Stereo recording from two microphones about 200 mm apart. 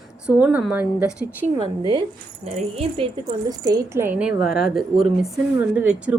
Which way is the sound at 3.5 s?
20° right (ahead or behind).